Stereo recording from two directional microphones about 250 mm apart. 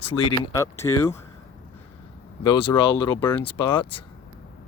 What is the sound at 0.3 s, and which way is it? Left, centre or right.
Speech, centre.